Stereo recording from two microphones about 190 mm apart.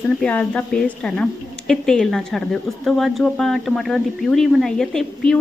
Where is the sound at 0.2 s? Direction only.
5° left (ahead or behind).